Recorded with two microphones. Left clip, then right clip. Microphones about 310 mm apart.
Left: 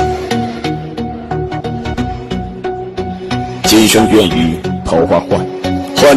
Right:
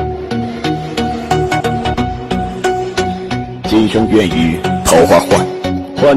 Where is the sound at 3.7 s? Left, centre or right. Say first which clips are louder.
Left 4 dB; left.